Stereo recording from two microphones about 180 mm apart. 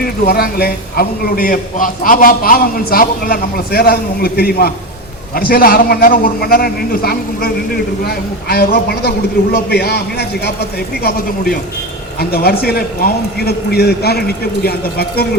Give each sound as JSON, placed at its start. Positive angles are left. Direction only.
{"t": 0.0, "sound": "a man's voice", "side_deg": 60}